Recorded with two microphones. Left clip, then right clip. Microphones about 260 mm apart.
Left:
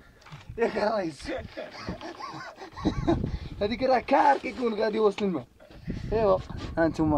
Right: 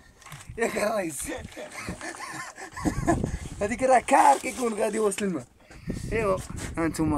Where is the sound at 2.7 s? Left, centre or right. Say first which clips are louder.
Right 2 dB; centre.